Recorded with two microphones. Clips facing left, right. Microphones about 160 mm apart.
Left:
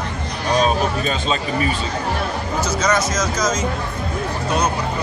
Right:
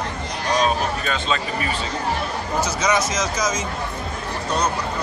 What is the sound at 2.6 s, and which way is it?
Speech, 15° right (ahead or behind).